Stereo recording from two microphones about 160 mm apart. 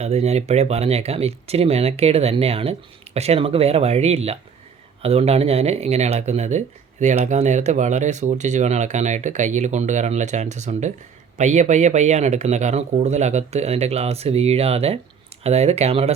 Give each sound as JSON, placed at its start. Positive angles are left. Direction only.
{"t": 0.0, "sound": "speech", "side_deg": -40}